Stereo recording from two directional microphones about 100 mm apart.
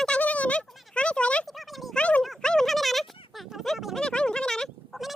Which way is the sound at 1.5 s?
Centre (ahead or behind).